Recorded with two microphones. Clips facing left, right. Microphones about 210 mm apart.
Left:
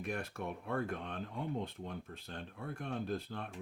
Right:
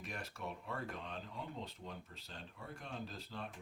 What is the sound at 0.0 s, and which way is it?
Speech, 55° left (ahead or behind).